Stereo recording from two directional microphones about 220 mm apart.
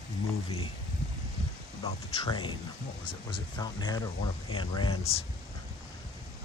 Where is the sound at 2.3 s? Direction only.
20° left (ahead or behind).